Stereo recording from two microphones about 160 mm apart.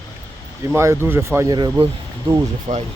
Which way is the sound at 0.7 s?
15° right (ahead or behind).